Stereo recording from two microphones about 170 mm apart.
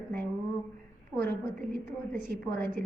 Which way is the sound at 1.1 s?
Centre (ahead or behind).